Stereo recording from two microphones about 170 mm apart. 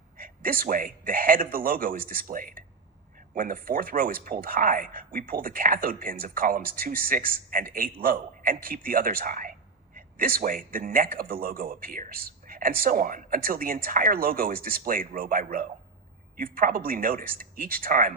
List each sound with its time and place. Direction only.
0.2 s a man's voice: 55° right (ahead or behind)